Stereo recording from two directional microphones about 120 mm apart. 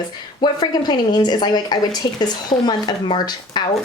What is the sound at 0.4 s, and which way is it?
A woman's voice, 35° left (ahead or behind).